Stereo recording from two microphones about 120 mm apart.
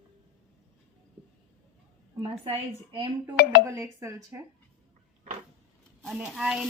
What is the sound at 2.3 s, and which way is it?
Speech, 55° right (ahead or behind).